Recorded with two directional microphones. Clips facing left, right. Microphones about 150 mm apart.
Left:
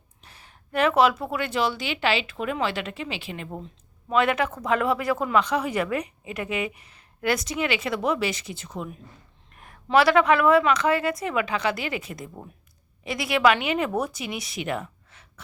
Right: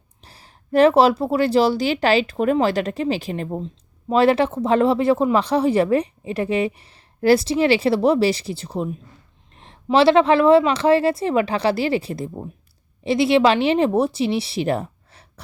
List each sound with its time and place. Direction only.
0.2 s a woman's voice: 35° right (ahead or behind)